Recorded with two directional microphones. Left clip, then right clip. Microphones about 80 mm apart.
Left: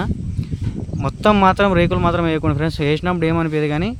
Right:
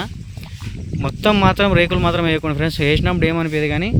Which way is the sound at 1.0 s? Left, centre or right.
Centre.